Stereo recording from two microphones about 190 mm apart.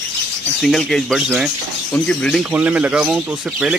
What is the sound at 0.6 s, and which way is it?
Speech, centre (ahead or behind).